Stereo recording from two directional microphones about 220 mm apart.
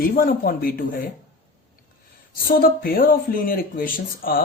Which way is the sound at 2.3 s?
40° left (ahead or behind).